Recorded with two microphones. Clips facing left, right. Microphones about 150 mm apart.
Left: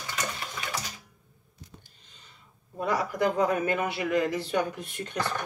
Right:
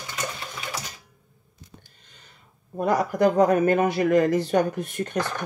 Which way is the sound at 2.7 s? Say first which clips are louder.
Right 6 dB; 45° right (ahead or behind).